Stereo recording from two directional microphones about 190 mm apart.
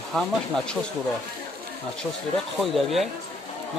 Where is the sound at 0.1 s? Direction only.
Centre (ahead or behind).